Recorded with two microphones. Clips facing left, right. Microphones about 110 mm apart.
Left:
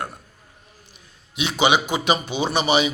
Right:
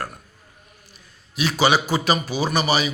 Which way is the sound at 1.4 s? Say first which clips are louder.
Even; 20° left (ahead or behind).